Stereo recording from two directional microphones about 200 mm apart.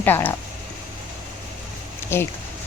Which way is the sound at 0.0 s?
10° left (ahead or behind).